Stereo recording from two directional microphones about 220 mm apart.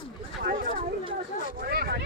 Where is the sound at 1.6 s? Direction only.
45° right (ahead or behind).